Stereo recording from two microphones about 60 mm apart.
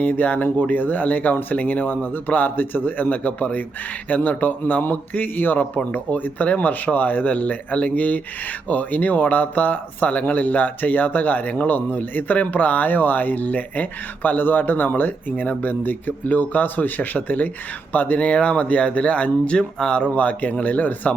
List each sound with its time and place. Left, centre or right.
0.0 s speech: left